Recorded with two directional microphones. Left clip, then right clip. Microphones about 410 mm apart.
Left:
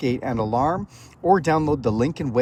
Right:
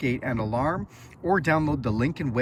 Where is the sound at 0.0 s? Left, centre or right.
Centre.